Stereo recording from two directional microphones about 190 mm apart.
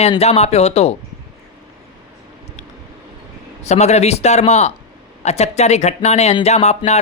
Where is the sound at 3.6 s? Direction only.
35° left (ahead or behind).